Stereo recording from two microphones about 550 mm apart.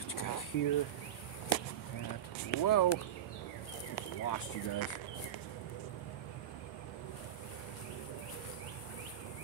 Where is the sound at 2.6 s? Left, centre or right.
Left.